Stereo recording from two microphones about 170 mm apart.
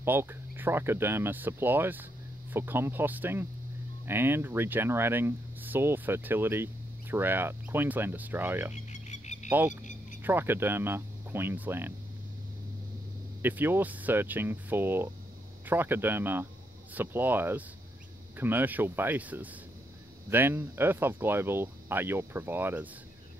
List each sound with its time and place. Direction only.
0.0 s speech: 15° right (ahead or behind)
8.7 s a sound: 40° left (ahead or behind)
10.2 s speech: 15° right (ahead or behind)
13.4 s speech: 10° right (ahead or behind)